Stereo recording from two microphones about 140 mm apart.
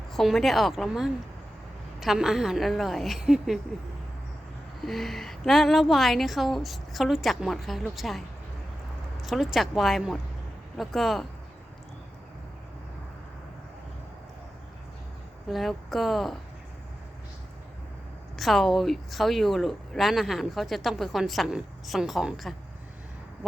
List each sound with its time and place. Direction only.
0.1 s speech: centre (ahead or behind)
4.8 s speech: centre (ahead or behind)
9.2 s speech: centre (ahead or behind)
15.4 s speech: centre (ahead or behind)
18.3 s speech: centre (ahead or behind)